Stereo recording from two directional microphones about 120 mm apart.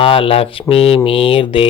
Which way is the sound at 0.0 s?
50° left (ahead or behind).